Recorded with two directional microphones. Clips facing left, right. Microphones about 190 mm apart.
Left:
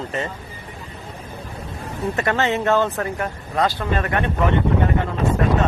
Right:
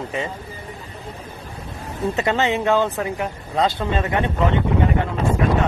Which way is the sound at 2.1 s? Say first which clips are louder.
Even; 20° right (ahead or behind).